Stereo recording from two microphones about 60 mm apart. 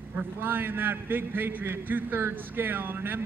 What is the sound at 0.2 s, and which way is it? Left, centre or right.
A man's voice, right.